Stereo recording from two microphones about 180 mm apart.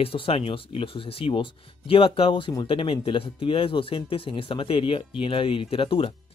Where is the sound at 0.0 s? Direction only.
30° left (ahead or behind).